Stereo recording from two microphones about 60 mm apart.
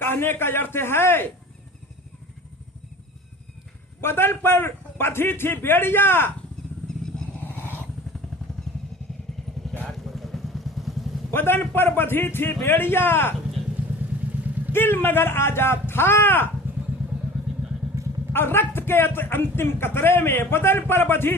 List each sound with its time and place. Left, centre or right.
0.0 s a man's voice: left
4.0 s a man's voice: left
6.8 s motorcycle: centre
7.4 s vehicle: left
9.7 s vehicle: centre
11.3 s a man's voice: left
13.8 s vehicle: right
14.7 s a man's voice: left
18.3 s a man's voice: left